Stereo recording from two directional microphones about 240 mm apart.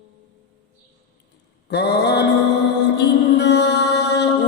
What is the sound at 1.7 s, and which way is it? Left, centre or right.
Mantra, left.